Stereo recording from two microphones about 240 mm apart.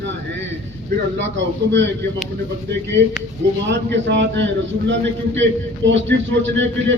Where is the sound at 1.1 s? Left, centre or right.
Right.